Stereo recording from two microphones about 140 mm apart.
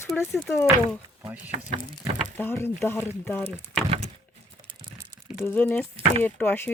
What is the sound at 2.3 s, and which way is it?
Speech, 15° left (ahead or behind).